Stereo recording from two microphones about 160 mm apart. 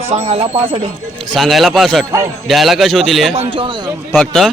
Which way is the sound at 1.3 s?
Centre (ahead or behind).